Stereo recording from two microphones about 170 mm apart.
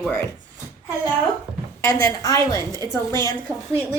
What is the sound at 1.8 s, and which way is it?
Speech, 20° left (ahead or behind).